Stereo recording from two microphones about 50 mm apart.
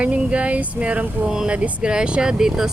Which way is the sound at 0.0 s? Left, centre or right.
Right.